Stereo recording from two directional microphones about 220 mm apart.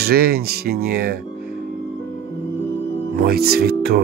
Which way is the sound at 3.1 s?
45° right (ahead or behind).